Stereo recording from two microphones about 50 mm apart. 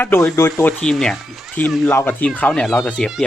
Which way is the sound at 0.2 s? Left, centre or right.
Left.